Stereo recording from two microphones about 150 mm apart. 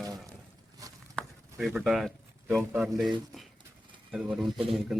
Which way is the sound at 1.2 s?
Centre (ahead or behind).